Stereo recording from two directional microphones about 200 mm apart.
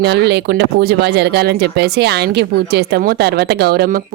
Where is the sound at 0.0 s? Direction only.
55° right (ahead or behind).